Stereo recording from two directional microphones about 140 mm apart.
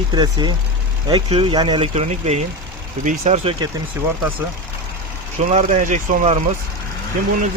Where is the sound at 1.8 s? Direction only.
45° right (ahead or behind).